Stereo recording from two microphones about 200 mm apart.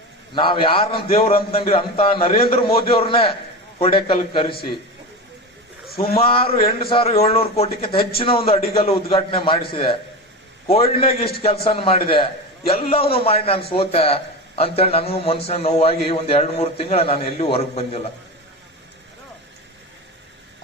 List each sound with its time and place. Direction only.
0.3 s a man's voice: 25° left (ahead or behind)
6.1 s a man's voice: 25° left (ahead or behind)